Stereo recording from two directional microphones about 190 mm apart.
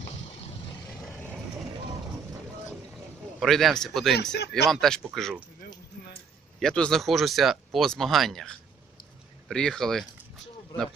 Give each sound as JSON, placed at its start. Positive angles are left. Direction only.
{"t": 3.4, "sound": "speech", "side_deg": 0}
{"t": 5.6, "sound": "a sound", "side_deg": 60}
{"t": 6.6, "sound": "speech", "side_deg": 5}